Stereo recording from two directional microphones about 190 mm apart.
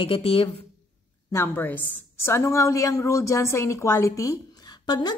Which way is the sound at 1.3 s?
10° left (ahead or behind).